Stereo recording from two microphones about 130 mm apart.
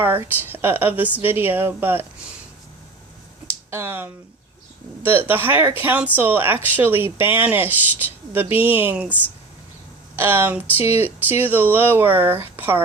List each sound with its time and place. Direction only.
0.0 s speech: 15° right (ahead or behind)
3.7 s speech: 15° right (ahead or behind)
10.2 s speech: 15° right (ahead or behind)